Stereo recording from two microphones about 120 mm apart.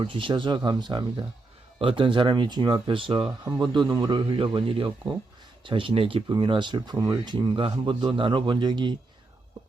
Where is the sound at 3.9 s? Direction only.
35° right (ahead or behind).